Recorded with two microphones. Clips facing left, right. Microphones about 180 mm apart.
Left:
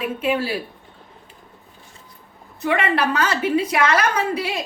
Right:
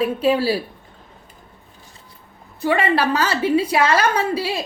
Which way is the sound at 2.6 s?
30° right (ahead or behind).